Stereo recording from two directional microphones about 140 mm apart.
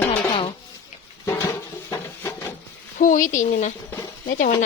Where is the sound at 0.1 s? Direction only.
45° left (ahead or behind).